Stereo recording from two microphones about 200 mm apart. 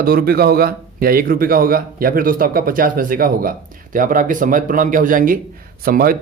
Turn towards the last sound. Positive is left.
turn(degrees=-45)  # may be behind; listen again after turning